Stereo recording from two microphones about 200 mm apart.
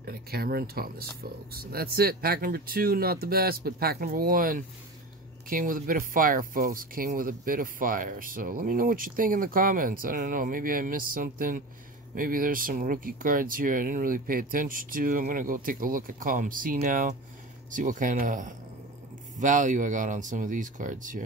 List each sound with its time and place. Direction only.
0.0 s speech: 50° right (ahead or behind)